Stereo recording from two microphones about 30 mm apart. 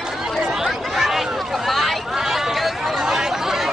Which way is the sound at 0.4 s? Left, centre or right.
Centre.